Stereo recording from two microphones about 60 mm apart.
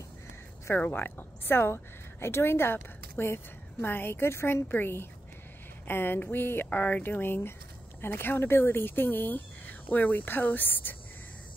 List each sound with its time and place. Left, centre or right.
0.7 s a woman's voice: left
4.6 s speech: left